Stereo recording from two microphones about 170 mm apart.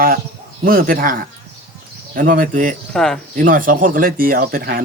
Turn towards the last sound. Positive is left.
turn(degrees=-60)  # may be behind; listen again after turning